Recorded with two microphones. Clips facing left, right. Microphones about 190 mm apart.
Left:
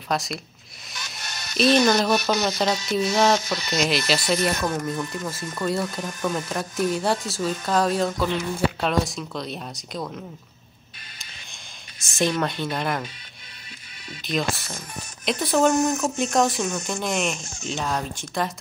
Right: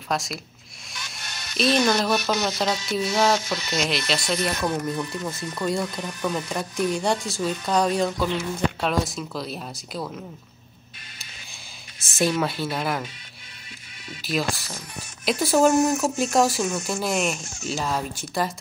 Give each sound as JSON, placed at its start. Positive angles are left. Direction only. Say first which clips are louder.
{"t": 0.1, "sound": "speech", "louder": "left 1 dB", "side_deg": 0}
{"t": 1.6, "sound": "speech", "louder": "left 3 dB", "side_deg": 0}
{"t": 3.3, "sound": "speech", "louder": "left 1 dB", "side_deg": 40}
{"t": 3.6, "sound": "speech", "louder": "left 2 dB", "side_deg": 0}
{"t": 12.2, "sound": "speech", "louder": "even", "side_deg": -5}
{"t": 14.2, "sound": "speech", "louder": "even", "side_deg": -5}